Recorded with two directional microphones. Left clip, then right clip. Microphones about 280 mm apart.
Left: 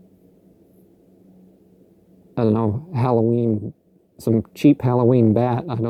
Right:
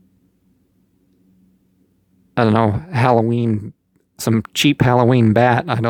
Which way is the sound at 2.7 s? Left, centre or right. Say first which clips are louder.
Right 7 dB; right.